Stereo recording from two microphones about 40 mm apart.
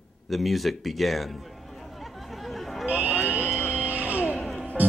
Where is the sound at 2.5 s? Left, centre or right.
Centre.